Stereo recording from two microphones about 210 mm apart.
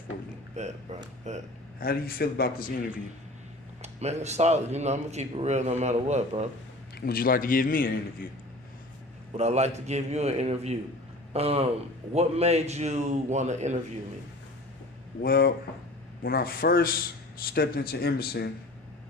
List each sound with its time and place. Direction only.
0.6 s speech: 30° right (ahead or behind)
1.8 s a man's voice: 45° left (ahead or behind)
3.8 s speech: 30° right (ahead or behind)
7.0 s a man's voice: 45° left (ahead or behind)
9.3 s speech: 30° right (ahead or behind)
15.2 s a man's voice: 45° left (ahead or behind)